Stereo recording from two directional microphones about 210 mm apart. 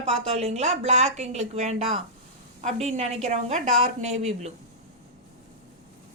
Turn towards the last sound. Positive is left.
turn(degrees=-30)  # may be behind; listen again after turning